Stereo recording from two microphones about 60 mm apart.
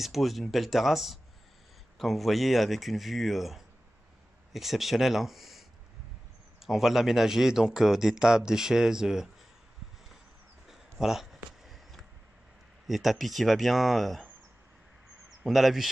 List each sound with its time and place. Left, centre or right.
0.0 s speech: centre
10.7 s a sound: centre
12.8 s speech: centre
15.2 s speech: centre